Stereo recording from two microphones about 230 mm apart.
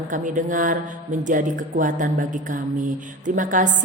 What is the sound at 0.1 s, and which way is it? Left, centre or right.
A woman's voice, right.